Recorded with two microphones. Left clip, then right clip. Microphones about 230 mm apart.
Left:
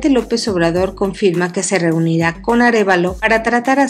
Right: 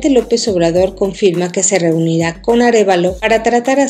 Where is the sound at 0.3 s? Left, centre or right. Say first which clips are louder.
Right 3 dB; centre.